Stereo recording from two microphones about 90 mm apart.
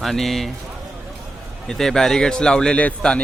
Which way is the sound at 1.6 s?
5° left (ahead or behind).